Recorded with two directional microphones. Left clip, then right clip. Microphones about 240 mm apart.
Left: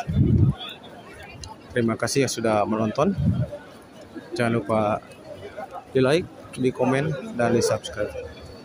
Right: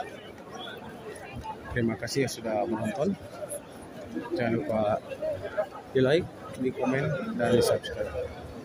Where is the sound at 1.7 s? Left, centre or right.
Centre.